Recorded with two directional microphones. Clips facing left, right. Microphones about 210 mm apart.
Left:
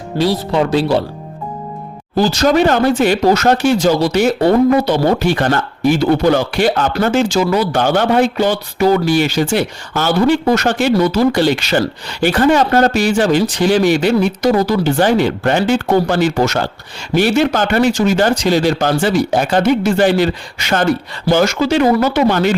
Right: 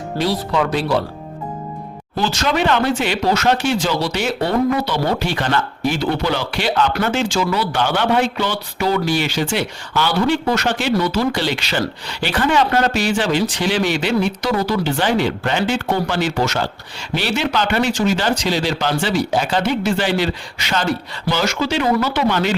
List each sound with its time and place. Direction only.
0.1 s speech: 20° left (ahead or behind)
0.5 s speech: 30° left (ahead or behind)
2.1 s speech: 40° left (ahead or behind)